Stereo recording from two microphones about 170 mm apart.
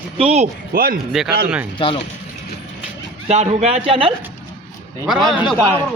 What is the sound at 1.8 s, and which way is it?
Speech, 30° left (ahead or behind).